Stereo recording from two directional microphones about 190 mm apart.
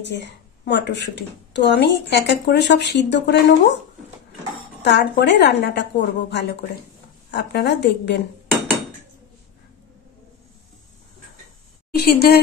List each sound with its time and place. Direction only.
0.0 s speech: 65° left (ahead or behind)
4.8 s a woman's voice: 65° left (ahead or behind)
12.0 s speech: 55° left (ahead or behind)